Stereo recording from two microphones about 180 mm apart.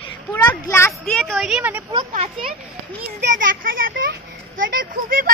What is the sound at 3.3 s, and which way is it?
Speech, 50° right (ahead or behind).